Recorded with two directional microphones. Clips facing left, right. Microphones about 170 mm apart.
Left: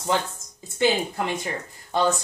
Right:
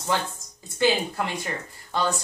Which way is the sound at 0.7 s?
20° left (ahead or behind).